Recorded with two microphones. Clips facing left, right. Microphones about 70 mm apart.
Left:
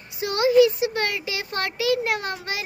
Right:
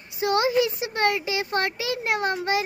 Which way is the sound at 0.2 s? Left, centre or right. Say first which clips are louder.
Left 4 dB; right.